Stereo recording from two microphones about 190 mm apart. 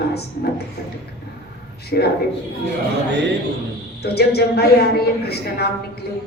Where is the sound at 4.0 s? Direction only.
60° left (ahead or behind).